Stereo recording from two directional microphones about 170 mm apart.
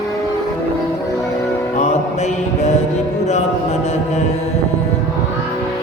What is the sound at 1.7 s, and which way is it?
Music, 40° left (ahead or behind).